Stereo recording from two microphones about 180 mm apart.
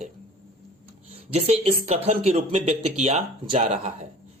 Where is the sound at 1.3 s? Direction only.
35° right (ahead or behind).